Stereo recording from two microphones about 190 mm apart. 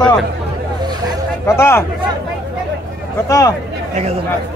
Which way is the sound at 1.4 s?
15° left (ahead or behind).